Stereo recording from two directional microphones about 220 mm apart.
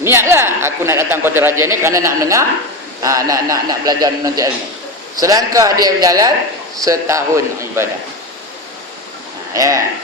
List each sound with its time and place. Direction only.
0.0 s a man's voice: 10° right (ahead or behind)
9.5 s a man's voice: 15° right (ahead or behind)